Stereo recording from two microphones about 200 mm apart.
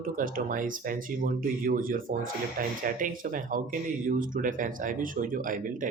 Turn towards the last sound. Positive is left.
turn(degrees=-40)  # may be behind; listen again after turning